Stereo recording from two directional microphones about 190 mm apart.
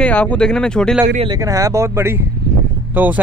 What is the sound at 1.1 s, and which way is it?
Speech, 25° right (ahead or behind).